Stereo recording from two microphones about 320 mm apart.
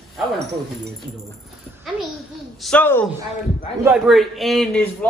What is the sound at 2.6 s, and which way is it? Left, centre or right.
Speech, centre.